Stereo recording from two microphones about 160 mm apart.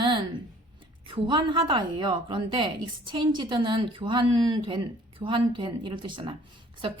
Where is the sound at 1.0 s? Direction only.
30° right (ahead or behind).